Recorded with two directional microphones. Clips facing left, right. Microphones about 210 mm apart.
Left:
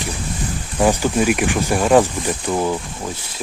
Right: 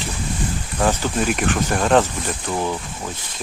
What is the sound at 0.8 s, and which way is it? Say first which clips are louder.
Speech: left 4 dB; 10° left (ahead or behind).